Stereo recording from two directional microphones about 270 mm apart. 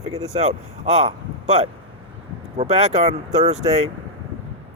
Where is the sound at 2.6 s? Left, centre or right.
Right.